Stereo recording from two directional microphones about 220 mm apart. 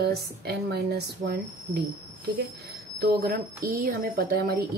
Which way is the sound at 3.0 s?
45° right (ahead or behind).